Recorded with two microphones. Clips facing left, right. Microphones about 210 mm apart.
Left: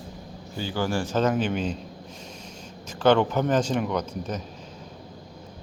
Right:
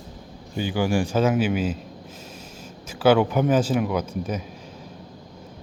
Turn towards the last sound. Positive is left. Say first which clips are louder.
# right 2 dB
turn(degrees=-10)  # may be behind; listen again after turning